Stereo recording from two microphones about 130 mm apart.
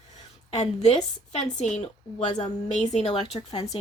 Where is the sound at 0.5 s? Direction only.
60° left (ahead or behind).